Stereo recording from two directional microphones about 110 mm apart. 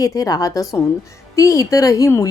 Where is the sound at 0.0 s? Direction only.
35° left (ahead or behind).